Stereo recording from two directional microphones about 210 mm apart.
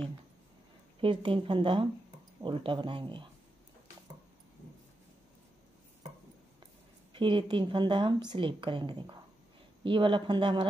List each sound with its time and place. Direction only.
1.0 s a woman's voice: 25° right (ahead or behind)
7.2 s a woman's voice: 20° right (ahead or behind)